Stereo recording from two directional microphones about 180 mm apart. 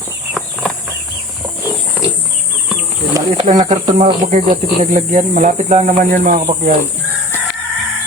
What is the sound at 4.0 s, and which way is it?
Speech, 40° right (ahead or behind).